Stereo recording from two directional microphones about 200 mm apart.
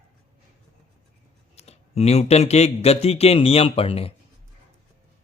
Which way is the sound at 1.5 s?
30° left (ahead or behind).